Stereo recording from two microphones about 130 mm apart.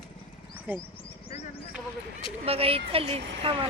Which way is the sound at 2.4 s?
50° right (ahead or behind).